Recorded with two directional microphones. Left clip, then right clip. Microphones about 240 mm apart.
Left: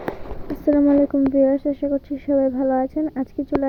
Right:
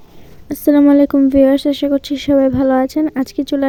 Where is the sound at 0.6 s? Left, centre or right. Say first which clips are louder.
Right 6 dB; right.